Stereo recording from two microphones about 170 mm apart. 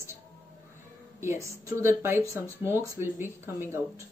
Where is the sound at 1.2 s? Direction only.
15° right (ahead or behind).